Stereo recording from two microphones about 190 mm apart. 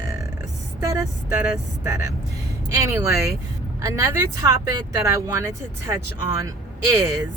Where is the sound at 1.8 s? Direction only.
15° right (ahead or behind).